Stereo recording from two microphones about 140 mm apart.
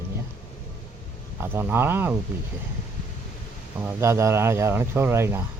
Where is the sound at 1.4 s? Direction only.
15° right (ahead or behind).